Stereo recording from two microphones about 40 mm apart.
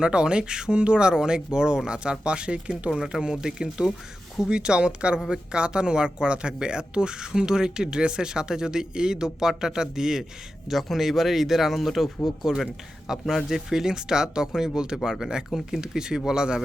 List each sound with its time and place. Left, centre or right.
0.0 s speech: right
10.7 s speech: centre